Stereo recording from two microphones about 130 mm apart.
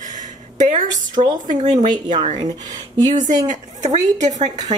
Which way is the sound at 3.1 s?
75° right (ahead or behind).